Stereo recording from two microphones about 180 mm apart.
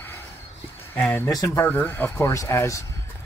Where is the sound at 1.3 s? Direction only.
15° left (ahead or behind).